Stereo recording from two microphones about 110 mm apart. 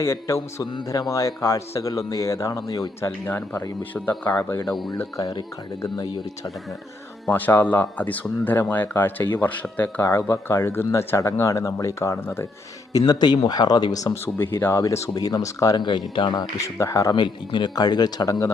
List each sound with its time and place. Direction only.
0.0 s a man's voice: 25° left (ahead or behind)
3.2 s a man's voice: 20° left (ahead or behind)
5.1 s speech: 40° left (ahead or behind)
7.3 s a man's voice: 15° left (ahead or behind)
12.9 s speech: 35° left (ahead or behind)